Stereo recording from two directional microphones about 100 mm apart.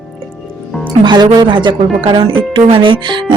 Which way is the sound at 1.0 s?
45° right (ahead or behind).